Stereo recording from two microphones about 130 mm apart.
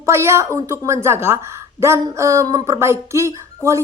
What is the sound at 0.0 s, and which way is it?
Speech, 20° right (ahead or behind).